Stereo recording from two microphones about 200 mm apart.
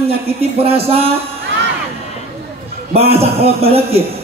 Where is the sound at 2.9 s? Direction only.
30° right (ahead or behind).